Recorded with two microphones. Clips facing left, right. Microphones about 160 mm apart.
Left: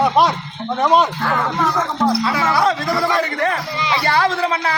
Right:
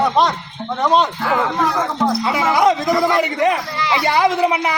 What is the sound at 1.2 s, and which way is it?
Speech, 5° right (ahead or behind).